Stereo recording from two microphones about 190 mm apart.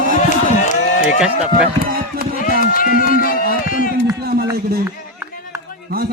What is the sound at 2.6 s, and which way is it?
Music, 45° left (ahead or behind).